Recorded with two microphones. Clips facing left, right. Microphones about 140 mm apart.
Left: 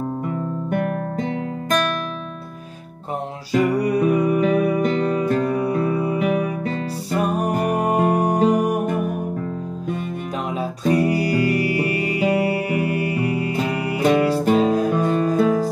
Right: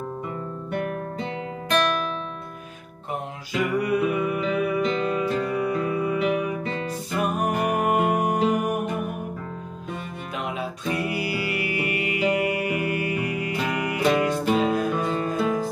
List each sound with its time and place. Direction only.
0.7 s guitar: 45° left (ahead or behind)
3.5 s music: 35° left (ahead or behind)
10.6 s music: 40° left (ahead or behind)